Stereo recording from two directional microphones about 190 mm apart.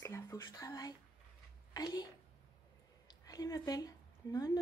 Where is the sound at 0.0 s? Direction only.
15° left (ahead or behind).